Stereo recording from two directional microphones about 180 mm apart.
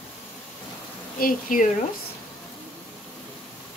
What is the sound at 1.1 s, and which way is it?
Speech, 50° left (ahead or behind).